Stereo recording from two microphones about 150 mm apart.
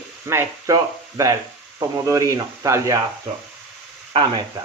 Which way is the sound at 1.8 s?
20° right (ahead or behind).